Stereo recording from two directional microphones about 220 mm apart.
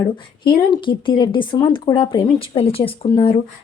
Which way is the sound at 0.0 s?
20° left (ahead or behind).